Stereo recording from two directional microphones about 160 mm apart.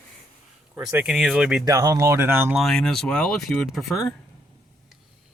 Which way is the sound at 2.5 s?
Centre (ahead or behind).